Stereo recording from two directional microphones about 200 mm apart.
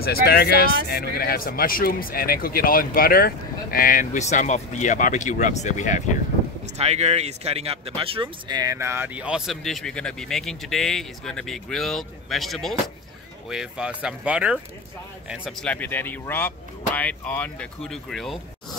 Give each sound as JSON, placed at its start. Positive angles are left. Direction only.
{"t": 0.0, "sound": "speech", "side_deg": 50}
{"t": 6.6, "sound": "speech", "side_deg": -30}